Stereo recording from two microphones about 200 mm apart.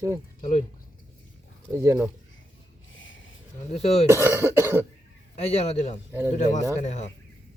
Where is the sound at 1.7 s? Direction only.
15° right (ahead or behind).